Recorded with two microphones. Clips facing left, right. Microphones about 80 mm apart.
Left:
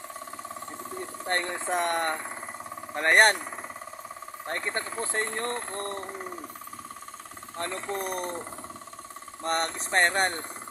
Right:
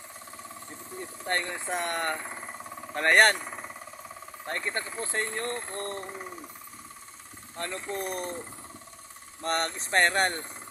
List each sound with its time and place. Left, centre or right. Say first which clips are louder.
1.2 s speech: left 1 dB; left
7.5 s speech: left 2 dB; left
9.4 s speech: left 1 dB; left